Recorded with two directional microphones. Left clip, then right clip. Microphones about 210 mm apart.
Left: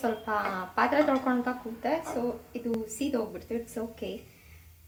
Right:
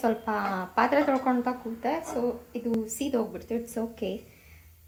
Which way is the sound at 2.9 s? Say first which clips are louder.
Right 2 dB; 20° right (ahead or behind).